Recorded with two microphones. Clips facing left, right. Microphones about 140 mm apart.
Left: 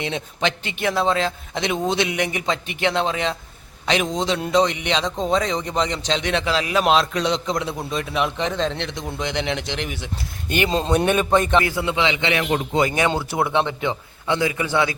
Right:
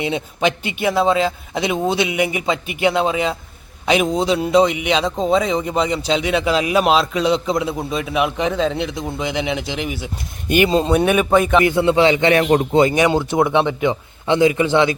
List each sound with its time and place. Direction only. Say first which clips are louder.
0.0 s a man's voice: right 5 dB; 5° right (ahead or behind)
11.6 s a man's voice: right 8 dB; 25° right (ahead or behind)
11.9 s a man's voice: right 7 dB; 45° right (ahead or behind)
12.8 s a man's voice: right 5 dB; 15° right (ahead or behind)